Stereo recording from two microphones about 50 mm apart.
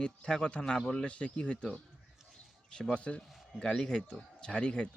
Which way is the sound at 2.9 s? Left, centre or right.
Left.